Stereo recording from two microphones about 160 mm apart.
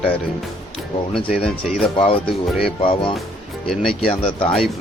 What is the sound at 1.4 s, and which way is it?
Speech, 5° left (ahead or behind).